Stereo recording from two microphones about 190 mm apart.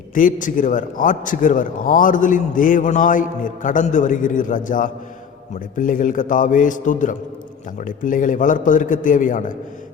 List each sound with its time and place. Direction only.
0.1 s a man's voice: 45° left (ahead or behind)